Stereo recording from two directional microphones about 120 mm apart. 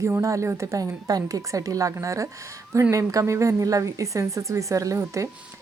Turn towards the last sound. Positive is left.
turn(degrees=-25)  # may be behind; listen again after turning